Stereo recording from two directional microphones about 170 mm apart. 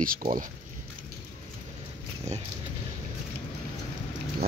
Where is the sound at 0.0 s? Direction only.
55° right (ahead or behind).